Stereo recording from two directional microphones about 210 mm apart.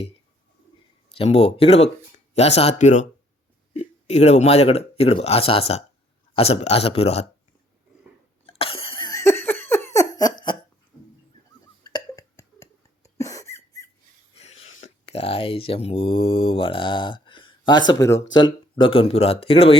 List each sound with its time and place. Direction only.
1.1 s speech: 30° left (ahead or behind)
8.4 s laughter: 25° left (ahead or behind)
11.8 s cough: 20° left (ahead or behind)
14.3 s speech: 30° left (ahead or behind)